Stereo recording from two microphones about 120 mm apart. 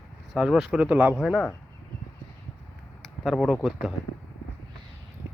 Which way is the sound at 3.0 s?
Centre (ahead or behind).